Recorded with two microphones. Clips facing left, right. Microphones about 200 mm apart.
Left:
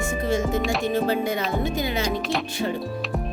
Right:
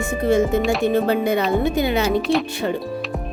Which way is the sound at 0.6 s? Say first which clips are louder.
Right 5 dB; centre (ahead or behind).